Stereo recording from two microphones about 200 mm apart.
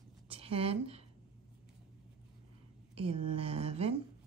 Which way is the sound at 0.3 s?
30° right (ahead or behind).